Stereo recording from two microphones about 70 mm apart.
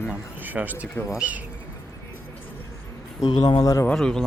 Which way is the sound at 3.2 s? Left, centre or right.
Left.